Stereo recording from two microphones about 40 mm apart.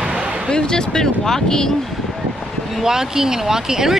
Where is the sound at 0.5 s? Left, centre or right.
Centre.